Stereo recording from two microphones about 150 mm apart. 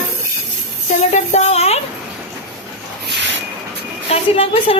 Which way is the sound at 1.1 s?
45° left (ahead or behind).